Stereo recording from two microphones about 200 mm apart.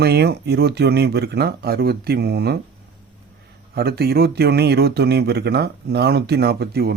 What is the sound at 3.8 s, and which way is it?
Speech, 55° right (ahead or behind).